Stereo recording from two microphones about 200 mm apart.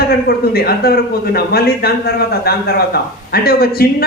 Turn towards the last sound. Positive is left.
turn(degrees=50)  # may be behind; listen again after turning